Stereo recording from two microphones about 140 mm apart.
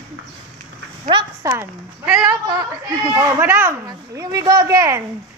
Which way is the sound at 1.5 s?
20° right (ahead or behind).